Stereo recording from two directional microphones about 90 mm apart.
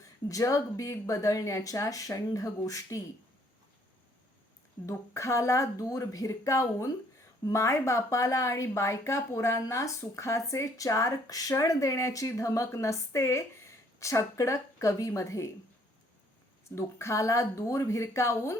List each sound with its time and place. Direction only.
0.0 s speech: 40° left (ahead or behind)
4.9 s speech: 35° left (ahead or behind)
16.7 s speech: 35° left (ahead or behind)